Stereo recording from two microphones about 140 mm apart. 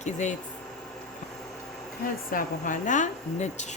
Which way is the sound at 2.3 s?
80° left.